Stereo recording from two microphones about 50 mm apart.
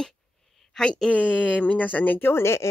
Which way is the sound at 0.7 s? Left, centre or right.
Centre.